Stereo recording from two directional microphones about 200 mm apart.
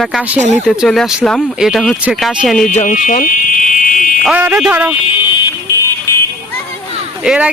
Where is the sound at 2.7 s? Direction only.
35° left (ahead or behind).